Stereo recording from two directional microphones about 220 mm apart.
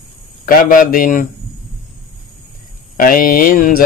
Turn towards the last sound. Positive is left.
turn(degrees=40)  # may be behind; listen again after turning